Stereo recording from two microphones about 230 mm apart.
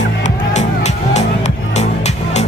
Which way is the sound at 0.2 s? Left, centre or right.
Left.